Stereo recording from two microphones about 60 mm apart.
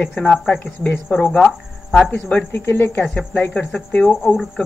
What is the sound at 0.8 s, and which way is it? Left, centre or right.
Speech, left.